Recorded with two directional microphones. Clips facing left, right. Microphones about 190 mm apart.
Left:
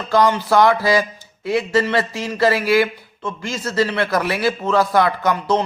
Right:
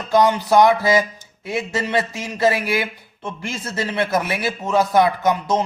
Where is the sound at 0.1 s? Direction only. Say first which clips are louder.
Even; 20° right (ahead or behind).